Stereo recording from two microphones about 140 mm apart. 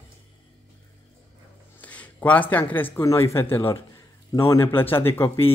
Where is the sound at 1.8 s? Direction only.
10° left (ahead or behind).